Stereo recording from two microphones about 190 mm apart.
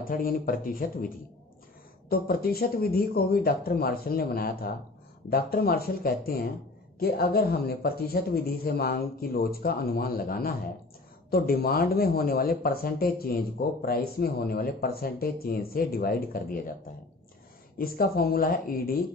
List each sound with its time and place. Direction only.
0.1 s speech: 50° left (ahead or behind)
17.7 s speech: 50° left (ahead or behind)